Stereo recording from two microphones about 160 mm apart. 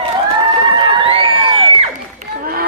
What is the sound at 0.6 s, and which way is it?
Crowd, 30° right (ahead or behind).